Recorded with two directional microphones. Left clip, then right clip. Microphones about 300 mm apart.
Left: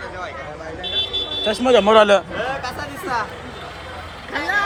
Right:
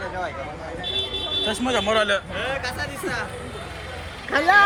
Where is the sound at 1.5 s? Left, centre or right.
Centre.